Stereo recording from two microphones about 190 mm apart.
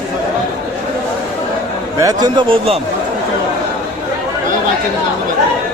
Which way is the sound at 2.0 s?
20° right (ahead or behind).